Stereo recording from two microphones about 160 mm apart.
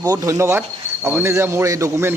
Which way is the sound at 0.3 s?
15° right (ahead or behind).